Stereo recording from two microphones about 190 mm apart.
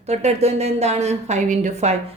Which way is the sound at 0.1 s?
35° right (ahead or behind).